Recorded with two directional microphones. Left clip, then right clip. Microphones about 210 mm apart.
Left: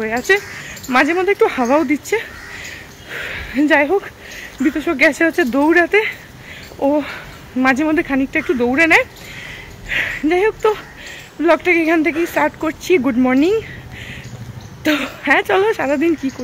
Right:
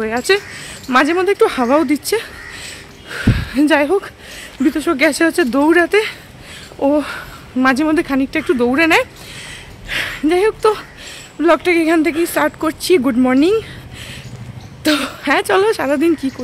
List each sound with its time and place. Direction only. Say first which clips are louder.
0.0 s speech: even; 20° right (ahead or behind)
14.8 s speech: right 1 dB; 20° right (ahead or behind)